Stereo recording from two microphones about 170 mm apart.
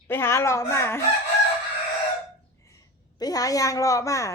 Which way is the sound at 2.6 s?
20° left (ahead or behind).